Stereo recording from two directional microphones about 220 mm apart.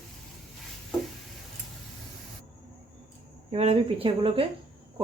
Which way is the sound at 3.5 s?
30° right (ahead or behind).